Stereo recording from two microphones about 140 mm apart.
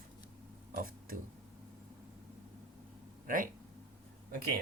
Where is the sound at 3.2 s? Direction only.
75° right (ahead or behind).